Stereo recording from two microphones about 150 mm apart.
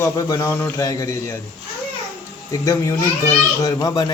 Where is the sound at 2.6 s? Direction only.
20° left (ahead or behind).